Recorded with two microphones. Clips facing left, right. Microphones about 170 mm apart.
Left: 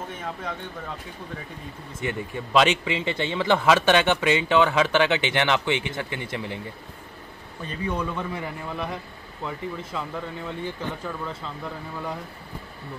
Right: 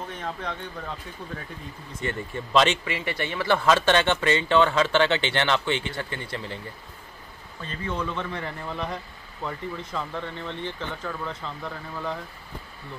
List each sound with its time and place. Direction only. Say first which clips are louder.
0.1 s speech: even; 5° left (ahead or behind)
2.0 s speech: left 1 dB; 10° left (ahead or behind)
7.6 s speech: left 2 dB; 15° left (ahead or behind)